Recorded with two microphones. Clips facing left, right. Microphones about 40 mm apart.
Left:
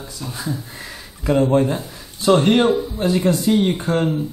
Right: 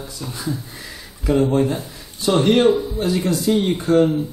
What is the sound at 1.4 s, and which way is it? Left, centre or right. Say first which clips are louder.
Speech: left 2 dB; centre.